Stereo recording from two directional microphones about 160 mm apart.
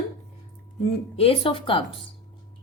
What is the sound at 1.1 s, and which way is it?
Speech, 35° left (ahead or behind).